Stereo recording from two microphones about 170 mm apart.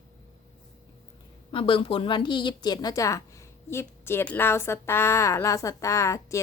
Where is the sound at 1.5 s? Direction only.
30° left (ahead or behind).